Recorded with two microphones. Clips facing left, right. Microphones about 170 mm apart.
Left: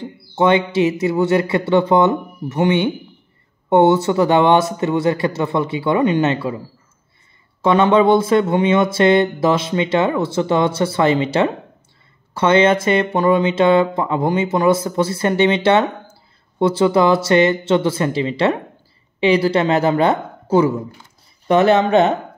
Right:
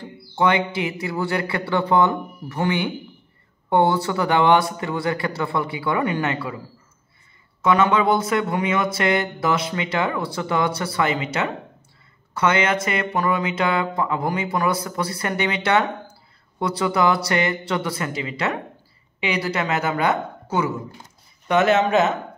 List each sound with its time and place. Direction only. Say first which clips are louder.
0.0 s speech: left 4 dB; 25° left (ahead or behind)
7.6 s speech: left 5 dB; 30° left (ahead or behind)